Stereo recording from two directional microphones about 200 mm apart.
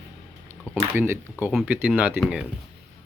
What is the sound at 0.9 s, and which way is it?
Speech, 10° right (ahead or behind).